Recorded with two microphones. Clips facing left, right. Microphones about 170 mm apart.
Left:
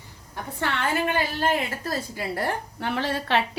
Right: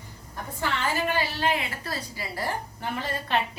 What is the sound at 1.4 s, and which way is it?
A woman's voice, 45° left (ahead or behind).